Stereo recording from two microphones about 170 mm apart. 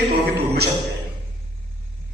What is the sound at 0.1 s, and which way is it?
Speech, 75° right (ahead or behind).